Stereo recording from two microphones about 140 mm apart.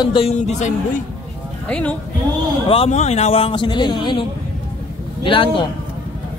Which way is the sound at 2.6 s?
45° left (ahead or behind).